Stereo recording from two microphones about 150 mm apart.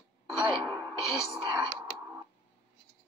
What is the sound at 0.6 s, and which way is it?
Music, 15° left (ahead or behind).